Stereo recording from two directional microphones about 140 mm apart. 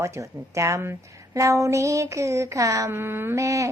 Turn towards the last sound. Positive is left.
turn(degrees=-20)  # may be behind; listen again after turning